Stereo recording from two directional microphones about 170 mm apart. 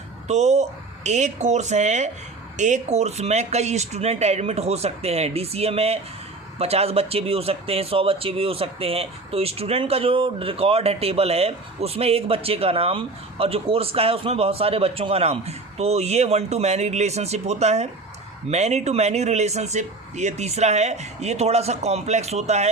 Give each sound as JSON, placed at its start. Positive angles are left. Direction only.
{"t": 0.3, "sound": "speech", "side_deg": -40}